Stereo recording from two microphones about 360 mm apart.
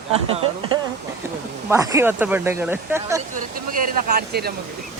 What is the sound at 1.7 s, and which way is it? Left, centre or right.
Speech, centre.